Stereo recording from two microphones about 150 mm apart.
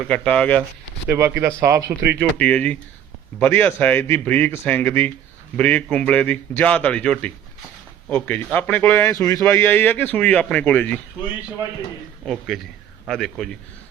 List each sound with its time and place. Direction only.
0.0 s a man's voice: 10° left (ahead or behind)
1.0 s speech: 15° right (ahead or behind)
2.1 s a man's voice: 10° left (ahead or behind)
12.2 s a man's voice: centre (ahead or behind)